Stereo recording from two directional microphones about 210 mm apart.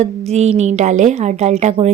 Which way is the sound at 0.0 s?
30° right (ahead or behind).